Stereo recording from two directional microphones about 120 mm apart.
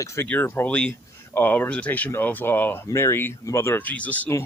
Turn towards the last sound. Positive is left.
turn(degrees=15)  # may be behind; listen again after turning